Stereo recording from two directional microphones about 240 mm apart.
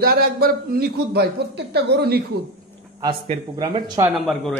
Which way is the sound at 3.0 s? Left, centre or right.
Centre.